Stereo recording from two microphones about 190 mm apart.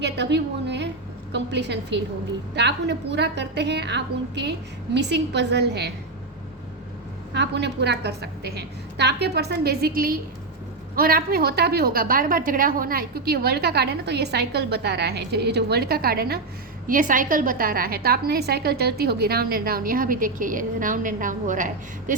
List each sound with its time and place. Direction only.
0.0 s a woman's voice: 65° right (ahead or behind)
7.3 s a woman's voice: 65° right (ahead or behind); by 22.1 s 45° right (ahead or behind)